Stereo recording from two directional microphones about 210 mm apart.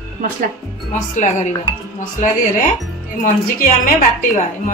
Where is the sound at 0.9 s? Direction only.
35° left (ahead or behind).